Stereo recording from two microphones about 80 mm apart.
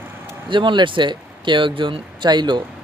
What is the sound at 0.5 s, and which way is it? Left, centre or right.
Speech, right.